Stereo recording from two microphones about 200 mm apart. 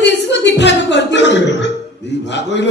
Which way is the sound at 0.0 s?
60° left (ahead or behind).